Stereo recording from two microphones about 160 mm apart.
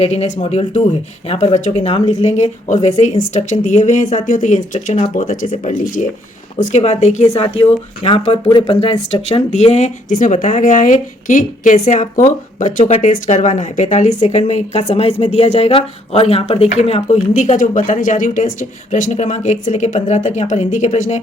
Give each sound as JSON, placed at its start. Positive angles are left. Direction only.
{"t": 0.0, "sound": "speech", "side_deg": 45}